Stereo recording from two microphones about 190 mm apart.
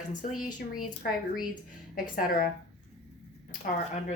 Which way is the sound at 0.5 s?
45° left (ahead or behind).